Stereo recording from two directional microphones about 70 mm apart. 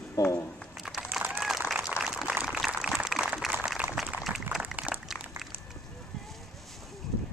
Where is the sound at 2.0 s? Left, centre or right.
Centre.